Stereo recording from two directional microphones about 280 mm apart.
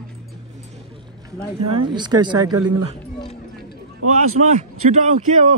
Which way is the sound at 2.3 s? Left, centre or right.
Right.